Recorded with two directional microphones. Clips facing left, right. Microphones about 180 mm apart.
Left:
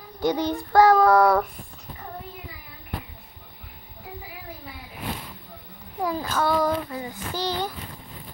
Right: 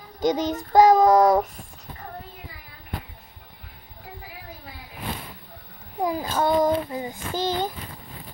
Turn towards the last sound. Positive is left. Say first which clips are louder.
# right 2 dB
turn(degrees=-50)  # may be behind; listen again after turning